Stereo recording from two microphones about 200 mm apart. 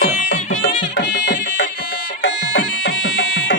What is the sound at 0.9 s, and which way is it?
Music, 65° left (ahead or behind).